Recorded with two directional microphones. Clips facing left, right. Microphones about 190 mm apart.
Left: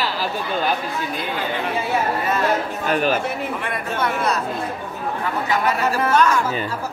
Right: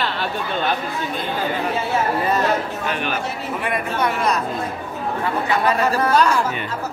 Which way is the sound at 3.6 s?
20° right (ahead or behind).